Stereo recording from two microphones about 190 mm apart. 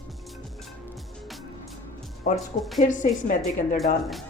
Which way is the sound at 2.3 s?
Centre (ahead or behind).